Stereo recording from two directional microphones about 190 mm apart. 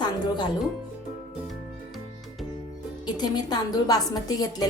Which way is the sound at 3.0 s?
20° left (ahead or behind).